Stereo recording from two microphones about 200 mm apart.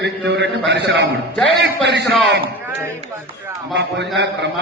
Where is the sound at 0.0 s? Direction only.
60° right (ahead or behind).